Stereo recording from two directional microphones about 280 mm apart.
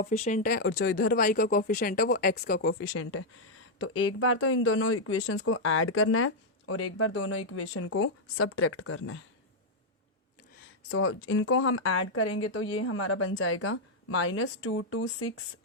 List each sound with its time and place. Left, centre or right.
0.0 s speech: left
10.9 s speech: left